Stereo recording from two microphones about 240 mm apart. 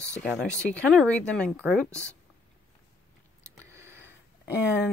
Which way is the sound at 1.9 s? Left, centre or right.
Centre.